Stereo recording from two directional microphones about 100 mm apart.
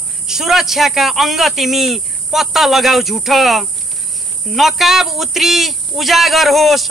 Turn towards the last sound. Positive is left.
turn(degrees=0)  # may be behind; listen again after turning